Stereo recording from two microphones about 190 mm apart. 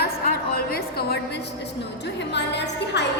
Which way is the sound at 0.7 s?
55° left (ahead or behind).